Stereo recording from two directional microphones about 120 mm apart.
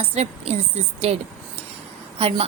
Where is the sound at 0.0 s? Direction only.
60° right (ahead or behind).